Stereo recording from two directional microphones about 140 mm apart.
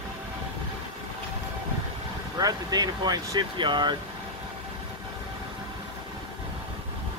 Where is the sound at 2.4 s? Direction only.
30° right (ahead or behind).